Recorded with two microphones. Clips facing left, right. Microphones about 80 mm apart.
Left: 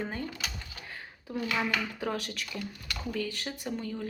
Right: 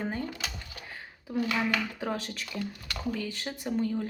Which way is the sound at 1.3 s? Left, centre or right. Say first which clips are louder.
Right 4 dB; centre.